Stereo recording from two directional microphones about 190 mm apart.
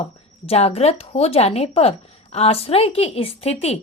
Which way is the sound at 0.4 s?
30° left (ahead or behind).